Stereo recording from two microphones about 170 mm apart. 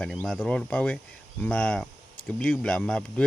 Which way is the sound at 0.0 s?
5° left (ahead or behind).